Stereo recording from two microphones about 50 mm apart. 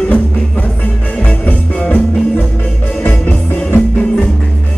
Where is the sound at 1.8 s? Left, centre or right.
Left.